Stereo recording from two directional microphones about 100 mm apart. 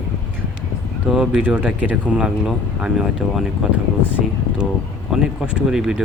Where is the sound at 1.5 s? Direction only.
15° right (ahead or behind).